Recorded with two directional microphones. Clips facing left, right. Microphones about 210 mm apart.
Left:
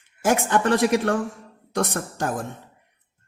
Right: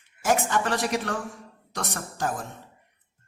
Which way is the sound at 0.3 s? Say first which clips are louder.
Left 4 dB; 55° left (ahead or behind).